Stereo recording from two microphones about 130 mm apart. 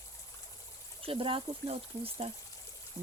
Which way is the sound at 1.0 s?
45° right (ahead or behind).